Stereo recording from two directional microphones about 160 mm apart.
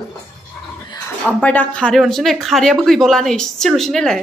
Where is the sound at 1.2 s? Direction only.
10° left (ahead or behind).